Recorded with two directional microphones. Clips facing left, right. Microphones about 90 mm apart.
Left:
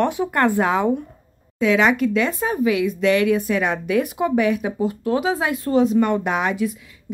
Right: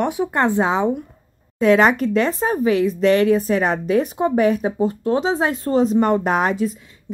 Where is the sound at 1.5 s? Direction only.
40° right (ahead or behind).